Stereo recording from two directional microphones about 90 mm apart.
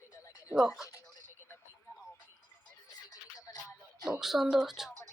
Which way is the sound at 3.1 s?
45° left (ahead or behind).